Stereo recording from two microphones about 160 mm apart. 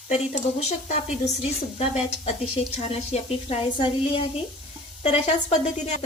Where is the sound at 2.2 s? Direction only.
40° left (ahead or behind).